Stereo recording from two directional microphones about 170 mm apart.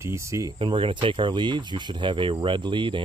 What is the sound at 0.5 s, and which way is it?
Speech, 30° right (ahead or behind).